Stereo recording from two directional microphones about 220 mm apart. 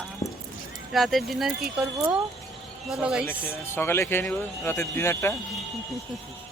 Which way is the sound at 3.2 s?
10° left (ahead or behind).